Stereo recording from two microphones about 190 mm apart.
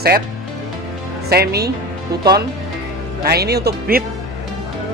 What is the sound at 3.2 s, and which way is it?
Speech, 55° right (ahead or behind).